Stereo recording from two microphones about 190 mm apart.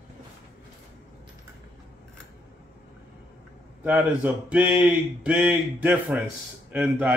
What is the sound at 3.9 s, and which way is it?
Speech, 10° right (ahead or behind).